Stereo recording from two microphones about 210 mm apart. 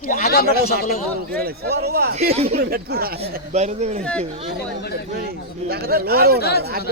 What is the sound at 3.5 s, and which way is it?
Speech, 30° right (ahead or behind).